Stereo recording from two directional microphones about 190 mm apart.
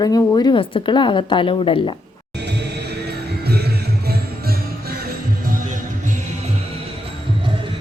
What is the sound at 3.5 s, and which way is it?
Music, 55° right (ahead or behind).